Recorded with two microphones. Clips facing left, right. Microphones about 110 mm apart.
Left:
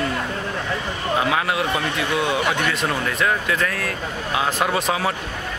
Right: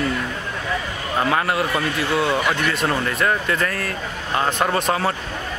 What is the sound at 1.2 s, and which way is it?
A man's voice, centre (ahead or behind).